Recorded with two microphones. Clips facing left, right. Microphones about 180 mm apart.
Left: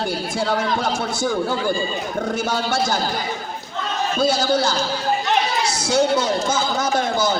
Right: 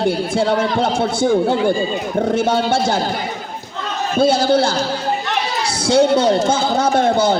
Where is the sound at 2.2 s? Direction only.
30° right (ahead or behind).